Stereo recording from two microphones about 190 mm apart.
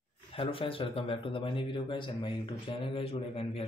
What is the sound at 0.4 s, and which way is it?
Speech, 30° left (ahead or behind).